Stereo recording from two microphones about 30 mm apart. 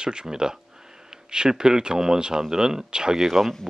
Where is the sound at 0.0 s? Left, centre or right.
Right.